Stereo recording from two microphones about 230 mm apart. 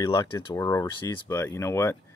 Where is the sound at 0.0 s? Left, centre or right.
Centre.